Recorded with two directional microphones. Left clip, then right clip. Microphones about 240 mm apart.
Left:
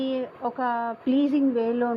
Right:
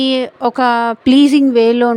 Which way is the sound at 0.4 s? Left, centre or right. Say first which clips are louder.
Right 14 dB; right.